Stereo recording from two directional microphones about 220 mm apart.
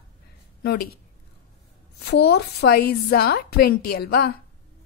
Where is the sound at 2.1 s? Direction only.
45° left (ahead or behind).